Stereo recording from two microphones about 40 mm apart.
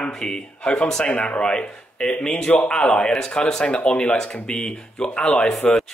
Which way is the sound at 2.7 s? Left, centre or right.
Left.